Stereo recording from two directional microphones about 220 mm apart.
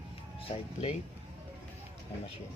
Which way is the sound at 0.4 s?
30° left (ahead or behind).